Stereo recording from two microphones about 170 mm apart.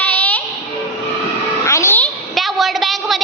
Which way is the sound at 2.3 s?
Centre (ahead or behind).